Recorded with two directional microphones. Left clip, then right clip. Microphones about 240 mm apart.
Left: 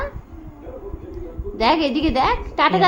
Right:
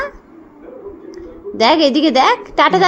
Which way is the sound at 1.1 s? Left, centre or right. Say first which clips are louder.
Right 7 dB; right.